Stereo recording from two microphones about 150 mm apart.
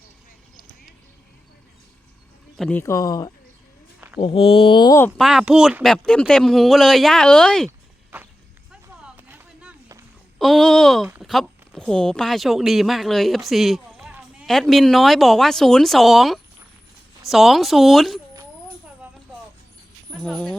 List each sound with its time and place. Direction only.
0.5 s a sound: 70° left (ahead or behind)
2.6 s speech: 5° left (ahead or behind)
2.8 s speech: 20° left (ahead or behind)
4.2 s speech: 40° left (ahead or behind)
5.1 s speech: centre (ahead or behind)
8.1 s a sound: 10° right (ahead or behind)
10.3 s speech: centre (ahead or behind)
20.1 s speech: centre (ahead or behind)